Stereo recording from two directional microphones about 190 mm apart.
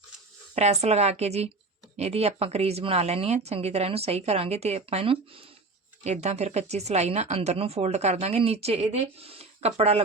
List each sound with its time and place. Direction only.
0.5 s speech: 35° right (ahead or behind)